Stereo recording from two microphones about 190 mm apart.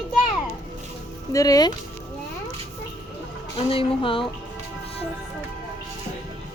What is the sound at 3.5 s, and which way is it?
Speech, 30° left (ahead or behind).